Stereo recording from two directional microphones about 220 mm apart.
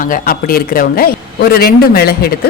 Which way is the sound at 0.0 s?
40° left (ahead or behind).